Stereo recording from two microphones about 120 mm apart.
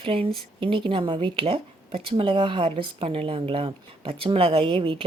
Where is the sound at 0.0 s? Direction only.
50° right (ahead or behind).